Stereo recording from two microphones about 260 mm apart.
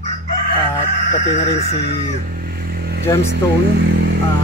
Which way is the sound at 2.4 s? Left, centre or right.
Right.